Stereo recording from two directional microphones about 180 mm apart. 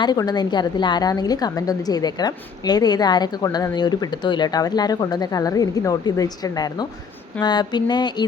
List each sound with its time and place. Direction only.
0.0 s a woman's voice: 20° left (ahead or behind)